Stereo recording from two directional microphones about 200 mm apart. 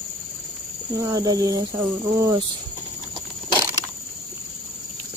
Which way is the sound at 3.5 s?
20° right (ahead or behind).